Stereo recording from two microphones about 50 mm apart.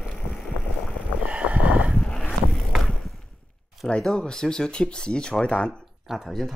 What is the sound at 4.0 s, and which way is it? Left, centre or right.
Speech, centre.